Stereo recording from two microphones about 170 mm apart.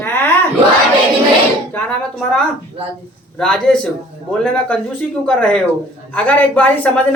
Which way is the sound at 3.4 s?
5° left (ahead or behind).